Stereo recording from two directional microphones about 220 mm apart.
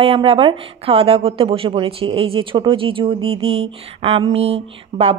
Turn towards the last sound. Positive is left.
turn(degrees=-25)  # may be behind; listen again after turning